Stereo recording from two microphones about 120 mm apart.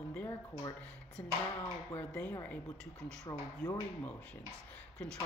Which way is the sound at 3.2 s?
30° left (ahead or behind).